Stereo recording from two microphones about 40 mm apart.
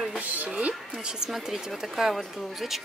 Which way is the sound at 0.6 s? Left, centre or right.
Right.